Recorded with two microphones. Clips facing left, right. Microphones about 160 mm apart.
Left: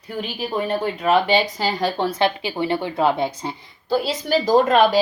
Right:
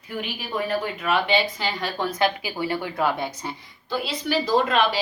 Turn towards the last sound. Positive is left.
turn(degrees=45)  # may be behind; listen again after turning